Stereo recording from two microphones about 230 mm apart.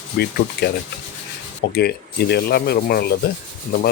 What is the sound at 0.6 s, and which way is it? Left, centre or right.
Speech, left.